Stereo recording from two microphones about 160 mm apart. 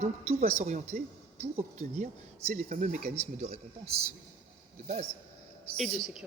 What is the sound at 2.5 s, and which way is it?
A man's voice, 50° right (ahead or behind).